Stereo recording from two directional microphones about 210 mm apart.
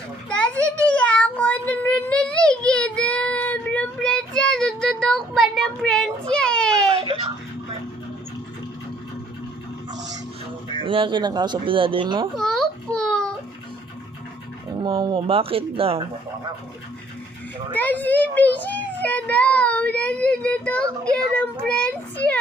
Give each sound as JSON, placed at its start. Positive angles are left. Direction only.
{"t": 0.3, "sound": "child singing", "side_deg": 5}
{"t": 6.9, "sound": "wail", "side_deg": -25}
{"t": 10.8, "sound": "speech", "side_deg": -25}
{"t": 12.4, "sound": "a sound", "side_deg": 0}
{"t": 14.8, "sound": "speech", "side_deg": -25}
{"t": 17.7, "sound": "a child's voice", "side_deg": 10}